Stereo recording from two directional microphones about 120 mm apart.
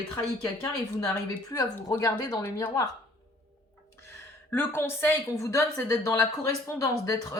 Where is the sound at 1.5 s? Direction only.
30° left (ahead or behind).